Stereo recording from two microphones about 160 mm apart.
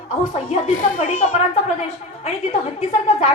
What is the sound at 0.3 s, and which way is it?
A woman's voice, 50° left (ahead or behind).